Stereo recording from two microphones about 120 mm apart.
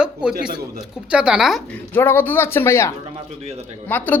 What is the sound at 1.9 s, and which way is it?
A man's voice, 15° left (ahead or behind).